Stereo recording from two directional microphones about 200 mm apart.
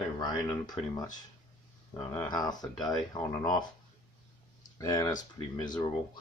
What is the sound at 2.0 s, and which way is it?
Speech, 20° left (ahead or behind).